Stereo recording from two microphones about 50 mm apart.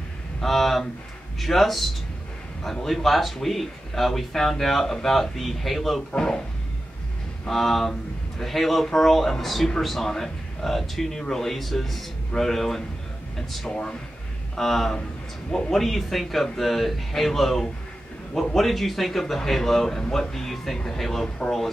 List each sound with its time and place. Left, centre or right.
0.4 s speech: centre
6.1 s speech: centre
7.4 s speech: centre